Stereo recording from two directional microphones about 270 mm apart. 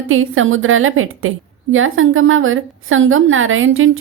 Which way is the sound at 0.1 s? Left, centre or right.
Right.